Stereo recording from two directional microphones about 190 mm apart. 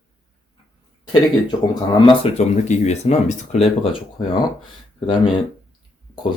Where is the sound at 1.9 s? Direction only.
25° left (ahead or behind).